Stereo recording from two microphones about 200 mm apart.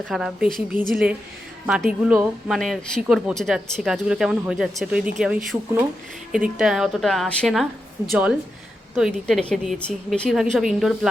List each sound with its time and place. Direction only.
0.1 s speech: centre (ahead or behind)